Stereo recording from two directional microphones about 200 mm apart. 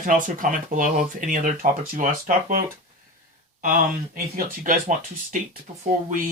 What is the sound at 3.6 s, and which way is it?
Speech, 45° right (ahead or behind).